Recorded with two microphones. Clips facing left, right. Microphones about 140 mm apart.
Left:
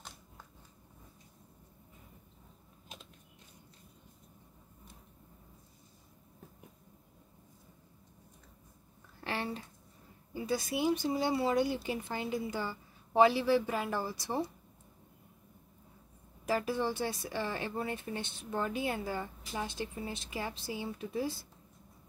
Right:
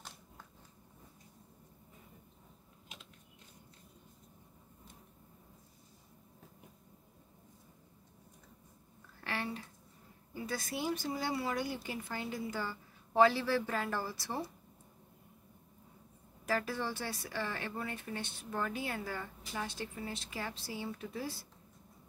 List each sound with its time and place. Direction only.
9.2 s a sound: 25° left (ahead or behind)
10.3 s speech: 15° left (ahead or behind)
16.4 s speech: 20° left (ahead or behind)